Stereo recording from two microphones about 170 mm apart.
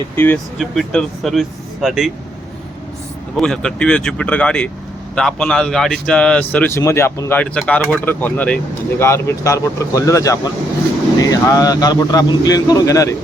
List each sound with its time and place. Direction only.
0.6 s speech: centre (ahead or behind)
3.3 s a man's voice: 5° left (ahead or behind); by 13.1 s 20° left (ahead or behind)